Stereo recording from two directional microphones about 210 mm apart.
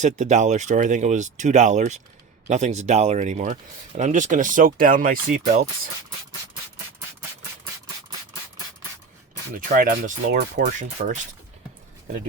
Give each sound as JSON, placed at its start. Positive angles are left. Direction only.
{"t": 0.0, "sound": "speech", "side_deg": -35}
{"t": 9.6, "sound": "speech", "side_deg": -40}
{"t": 10.8, "sound": "speech", "side_deg": -35}